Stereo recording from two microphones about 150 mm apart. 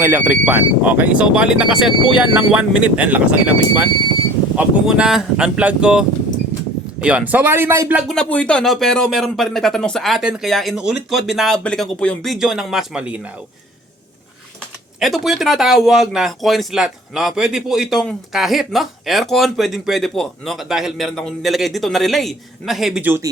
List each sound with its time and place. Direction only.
0.0 s speech: 15° right (ahead or behind)
8.0 s speech: 5° left (ahead or behind)
14.9 s speech: centre (ahead or behind)
23.0 s speech: 15° right (ahead or behind)